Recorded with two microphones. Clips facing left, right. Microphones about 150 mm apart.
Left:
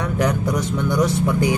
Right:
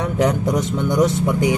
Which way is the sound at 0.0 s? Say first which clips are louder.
Right 2 dB; 20° right (ahead or behind).